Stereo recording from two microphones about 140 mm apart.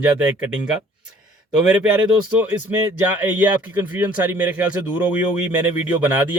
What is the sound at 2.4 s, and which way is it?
Speech, 15° right (ahead or behind).